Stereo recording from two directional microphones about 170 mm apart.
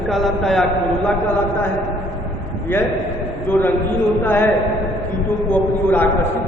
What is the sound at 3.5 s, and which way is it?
A man's voice, 10° left (ahead or behind).